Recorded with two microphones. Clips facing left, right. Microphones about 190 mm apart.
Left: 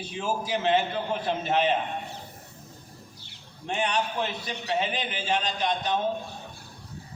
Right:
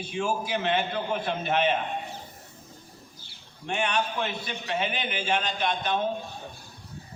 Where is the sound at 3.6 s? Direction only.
35° left (ahead or behind).